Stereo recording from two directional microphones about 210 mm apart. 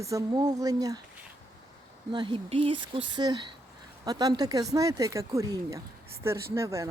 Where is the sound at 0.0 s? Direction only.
15° right (ahead or behind).